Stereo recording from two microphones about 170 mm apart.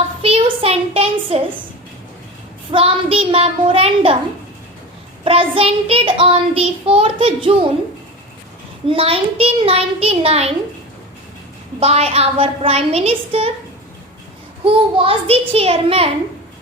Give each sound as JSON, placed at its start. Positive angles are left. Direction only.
{"t": 0.2, "sound": "a child's voice", "side_deg": -35}
{"t": 2.7, "sound": "child singing", "side_deg": -35}
{"t": 5.2, "sound": "child singing", "side_deg": -35}
{"t": 8.9, "sound": "child singing", "side_deg": -35}
{"t": 11.8, "sound": "child singing", "side_deg": -35}
{"t": 14.6, "sound": "child singing", "side_deg": -35}